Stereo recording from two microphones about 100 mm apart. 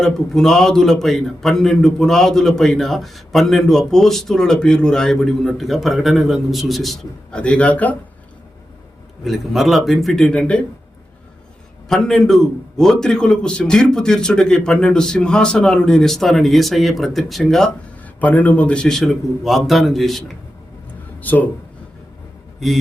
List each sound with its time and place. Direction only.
0.0 s a man's voice: 5° left (ahead or behind)
9.2 s a man's voice: centre (ahead or behind)
11.9 s a man's voice: 5° left (ahead or behind)
18.0 s a man's voice: 15° left (ahead or behind)
21.2 s speech: 15° left (ahead or behind)